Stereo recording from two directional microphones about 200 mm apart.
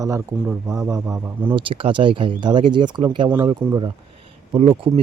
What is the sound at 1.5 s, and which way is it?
Speech, 25° right (ahead or behind).